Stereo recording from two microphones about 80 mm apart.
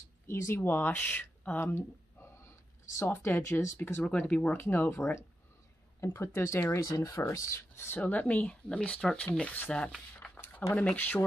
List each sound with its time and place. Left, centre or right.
0.3 s speech: left
3.0 s speech: left
4.3 s speech: centre
8.0 s speech: centre
10.1 s a sound: left